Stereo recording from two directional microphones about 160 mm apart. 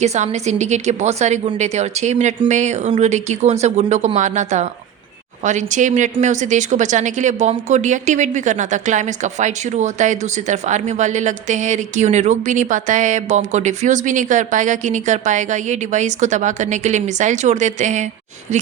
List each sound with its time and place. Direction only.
0.0 s speech: 45° right (ahead or behind)